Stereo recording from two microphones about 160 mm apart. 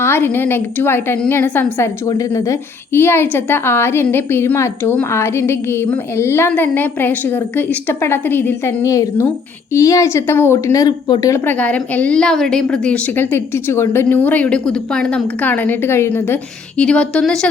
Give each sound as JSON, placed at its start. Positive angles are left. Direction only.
{"t": 0.0, "sound": "a woman's voice", "side_deg": 15}
{"t": 11.4, "sound": "a woman's voice", "side_deg": 10}